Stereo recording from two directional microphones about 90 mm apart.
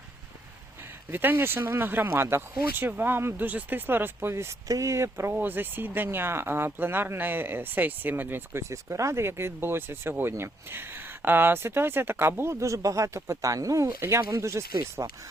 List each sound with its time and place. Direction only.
1.1 s speech: 20° right (ahead or behind)
8.7 s speech: 35° right (ahead or behind)